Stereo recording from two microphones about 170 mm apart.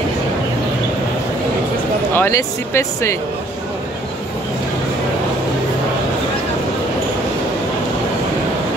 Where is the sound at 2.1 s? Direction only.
15° left (ahead or behind).